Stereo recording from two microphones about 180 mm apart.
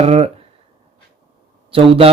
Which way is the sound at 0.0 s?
35° right (ahead or behind).